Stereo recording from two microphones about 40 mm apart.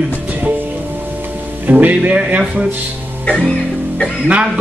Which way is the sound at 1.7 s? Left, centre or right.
Right.